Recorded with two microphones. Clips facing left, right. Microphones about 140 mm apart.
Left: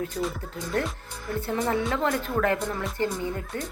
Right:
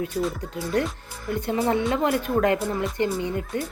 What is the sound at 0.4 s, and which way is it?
Speech, 15° right (ahead or behind).